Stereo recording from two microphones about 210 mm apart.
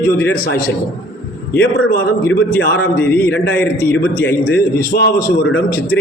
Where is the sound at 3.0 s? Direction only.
10° left (ahead or behind).